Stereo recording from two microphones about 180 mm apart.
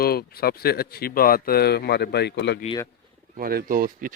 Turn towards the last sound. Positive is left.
turn(degrees=-50)  # may be behind; listen again after turning